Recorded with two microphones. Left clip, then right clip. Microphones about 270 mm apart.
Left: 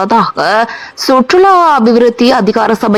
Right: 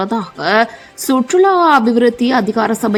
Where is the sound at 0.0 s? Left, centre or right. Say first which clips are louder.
Left 9 dB; centre.